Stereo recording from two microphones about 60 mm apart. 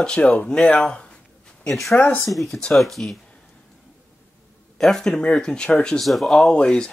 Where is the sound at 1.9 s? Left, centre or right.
Left.